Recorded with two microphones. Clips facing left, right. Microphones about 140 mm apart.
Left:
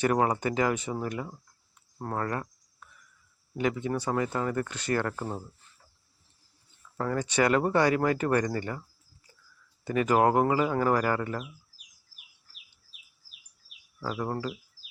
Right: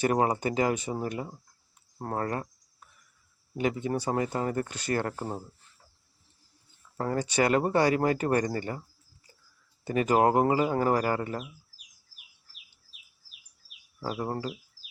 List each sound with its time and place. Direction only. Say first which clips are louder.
0.0 s speech: even; 30° right (ahead or behind)
3.6 s speech: even; 30° right (ahead or behind)
6.9 s speech: even; 30° right (ahead or behind)
9.8 s speech: even; 30° right (ahead or behind)
14.0 s speech: even; 30° right (ahead or behind)